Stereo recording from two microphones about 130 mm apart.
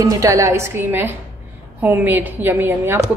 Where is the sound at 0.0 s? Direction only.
25° right (ahead or behind).